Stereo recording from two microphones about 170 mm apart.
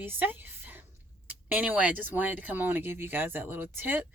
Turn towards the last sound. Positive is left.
turn(degrees=-10)  # may be behind; listen again after turning